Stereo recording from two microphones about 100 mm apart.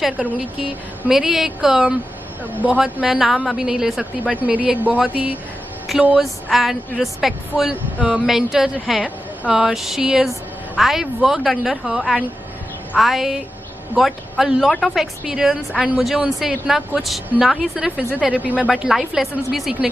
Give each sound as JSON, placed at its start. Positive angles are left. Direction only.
{"t": 0.0, "sound": "a woman's voice", "side_deg": -10}
{"t": 2.8, "sound": "a woman's voice", "side_deg": -5}
{"t": 5.9, "sound": "a woman's voice", "side_deg": -5}
{"t": 18.7, "sound": "a woman's voice", "side_deg": -5}